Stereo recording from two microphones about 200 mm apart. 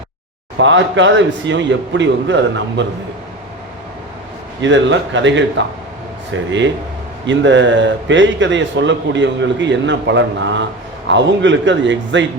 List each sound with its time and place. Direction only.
0.6 s speech: 65° right (ahead or behind)
4.6 s speech: 65° right (ahead or behind)